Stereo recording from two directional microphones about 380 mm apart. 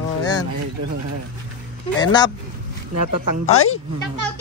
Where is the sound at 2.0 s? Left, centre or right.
Centre.